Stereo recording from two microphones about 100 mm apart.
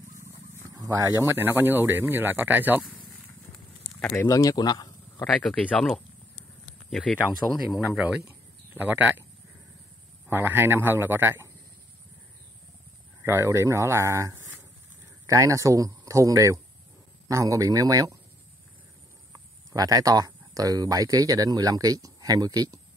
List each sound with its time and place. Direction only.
0.7 s speech: 40° right (ahead or behind)
1.3 s speech: 20° right (ahead or behind)
4.0 s speech: 20° left (ahead or behind)
4.3 s speech: 35° left (ahead or behind)
5.3 s speech: 10° left (ahead or behind); by 8.2 s 5° right (ahead or behind)
8.7 s a man's voice: 15° right (ahead or behind)
10.2 s speech: 20° right (ahead or behind)
13.2 s speech: 25° right (ahead or behind)
19.7 s speech: 40° right (ahead or behind)